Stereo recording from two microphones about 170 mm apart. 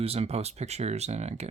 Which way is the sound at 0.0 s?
35° right (ahead or behind).